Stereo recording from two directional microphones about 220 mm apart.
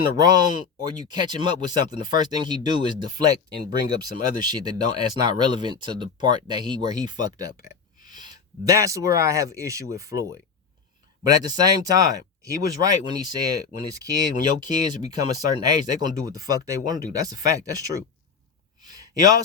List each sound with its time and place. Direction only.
0.0 s speech: 20° right (ahead or behind)
7.5 s speech: 35° left (ahead or behind)
8.0 s speech: 20° right (ahead or behind)
18.8 s a sound: 15° right (ahead or behind)